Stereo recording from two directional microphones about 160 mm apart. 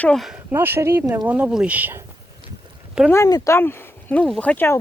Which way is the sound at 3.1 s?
20° left (ahead or behind).